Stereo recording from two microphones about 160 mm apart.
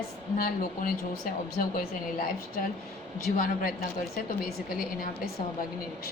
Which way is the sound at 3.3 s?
60° left (ahead or behind).